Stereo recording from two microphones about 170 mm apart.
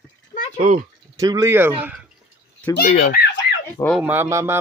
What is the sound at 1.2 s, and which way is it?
Speech, 20° right (ahead or behind).